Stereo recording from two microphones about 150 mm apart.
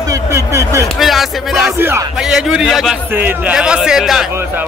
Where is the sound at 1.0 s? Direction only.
Centre (ahead or behind).